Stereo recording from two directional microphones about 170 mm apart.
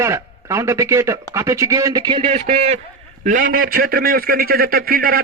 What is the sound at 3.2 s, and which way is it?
A man's voice, 50° right (ahead or behind).